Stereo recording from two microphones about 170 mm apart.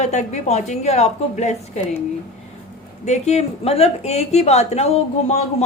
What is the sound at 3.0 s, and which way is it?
A woman's voice, 40° left (ahead or behind).